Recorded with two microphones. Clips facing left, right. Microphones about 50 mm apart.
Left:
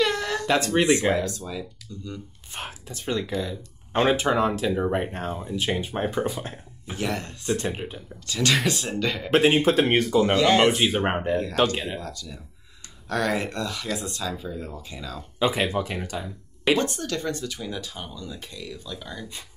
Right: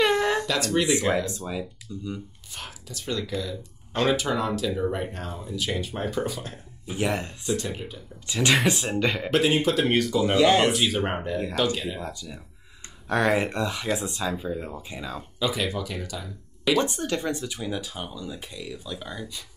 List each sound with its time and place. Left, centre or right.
0.0 s a sound: right
0.7 s speech: left
1.2 s speech: centre
2.5 s speech: left
7.0 s speech: centre
7.4 s speech: left
8.3 s speech: right
9.3 s speech: left
10.3 s speech: centre
10.7 s speech: left
12.0 s speech: centre
15.3 s speech: left
16.7 s speech: right